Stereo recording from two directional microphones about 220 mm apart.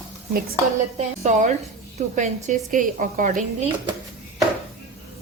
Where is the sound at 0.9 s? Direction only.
30° right (ahead or behind).